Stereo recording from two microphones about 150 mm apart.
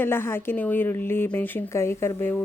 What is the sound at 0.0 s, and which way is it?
Speech, 15° left (ahead or behind).